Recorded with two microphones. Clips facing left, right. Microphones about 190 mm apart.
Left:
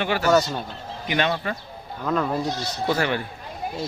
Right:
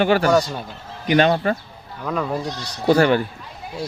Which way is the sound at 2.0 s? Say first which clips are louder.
Even; 5° right (ahead or behind).